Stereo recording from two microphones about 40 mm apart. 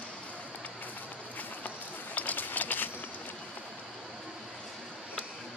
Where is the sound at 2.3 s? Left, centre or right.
Left.